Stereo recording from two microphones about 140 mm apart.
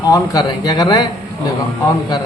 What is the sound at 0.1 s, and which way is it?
Speech, 30° left (ahead or behind).